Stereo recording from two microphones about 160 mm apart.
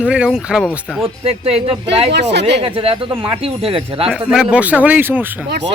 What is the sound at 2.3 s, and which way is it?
Speech, 90° right.